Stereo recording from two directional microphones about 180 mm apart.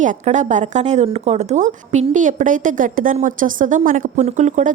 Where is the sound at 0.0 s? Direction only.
45° right (ahead or behind).